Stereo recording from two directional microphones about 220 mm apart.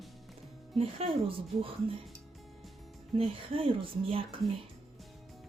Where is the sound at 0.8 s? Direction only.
25° right (ahead or behind).